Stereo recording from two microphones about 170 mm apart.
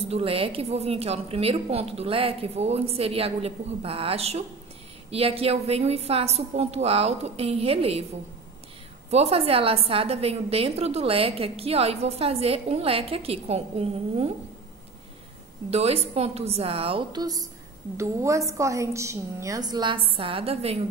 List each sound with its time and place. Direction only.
0.1 s a woman's voice: 35° right (ahead or behind)
9.1 s a woman's voice: 35° right (ahead or behind)
15.7 s a woman's voice: 35° right (ahead or behind)